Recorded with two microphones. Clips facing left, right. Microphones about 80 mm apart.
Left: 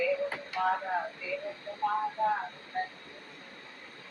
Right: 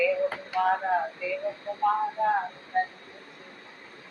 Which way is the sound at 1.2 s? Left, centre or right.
Right.